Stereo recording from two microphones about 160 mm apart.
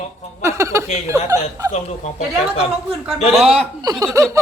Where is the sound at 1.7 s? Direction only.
45° left (ahead or behind).